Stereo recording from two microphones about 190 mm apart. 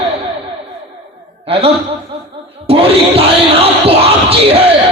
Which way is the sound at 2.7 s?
30° right (ahead or behind).